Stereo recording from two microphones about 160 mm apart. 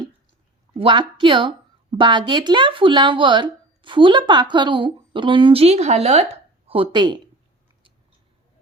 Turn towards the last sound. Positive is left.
turn(degrees=-30)  # may be behind; listen again after turning